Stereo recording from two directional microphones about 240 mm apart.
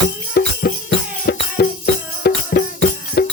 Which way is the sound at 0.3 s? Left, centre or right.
Left.